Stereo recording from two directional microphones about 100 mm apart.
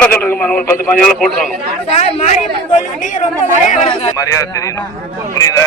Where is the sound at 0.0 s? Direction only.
15° left (ahead or behind).